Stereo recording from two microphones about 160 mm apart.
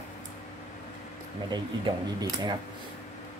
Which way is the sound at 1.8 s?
30° right (ahead or behind).